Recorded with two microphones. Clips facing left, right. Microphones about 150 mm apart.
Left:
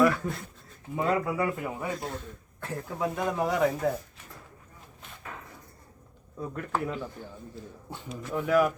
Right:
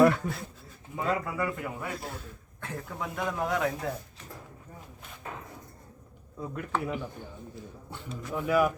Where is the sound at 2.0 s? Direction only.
Centre (ahead or behind).